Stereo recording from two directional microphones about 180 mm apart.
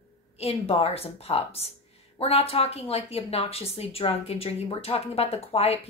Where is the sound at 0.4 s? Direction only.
35° left (ahead or behind).